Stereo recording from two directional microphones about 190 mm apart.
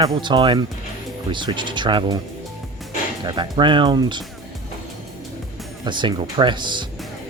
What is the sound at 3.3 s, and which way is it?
Speech, 25° right (ahead or behind).